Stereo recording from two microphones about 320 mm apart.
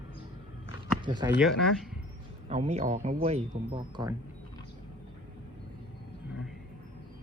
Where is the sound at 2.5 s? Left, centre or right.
Centre.